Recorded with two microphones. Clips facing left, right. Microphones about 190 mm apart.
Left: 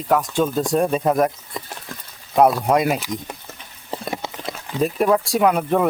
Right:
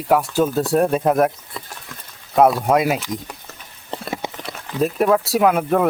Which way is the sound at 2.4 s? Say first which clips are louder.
Right 1 dB; centre (ahead or behind).